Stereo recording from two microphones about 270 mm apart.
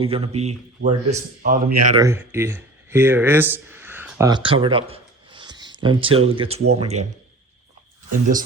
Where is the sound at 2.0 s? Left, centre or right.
Centre.